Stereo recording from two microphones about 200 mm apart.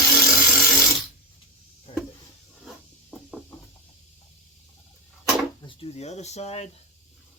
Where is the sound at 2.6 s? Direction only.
Centre (ahead or behind).